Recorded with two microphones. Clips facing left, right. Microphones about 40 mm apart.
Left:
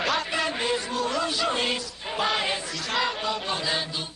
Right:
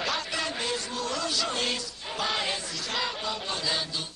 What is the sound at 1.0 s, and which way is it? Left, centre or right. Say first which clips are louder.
Music: left 3 dB; left.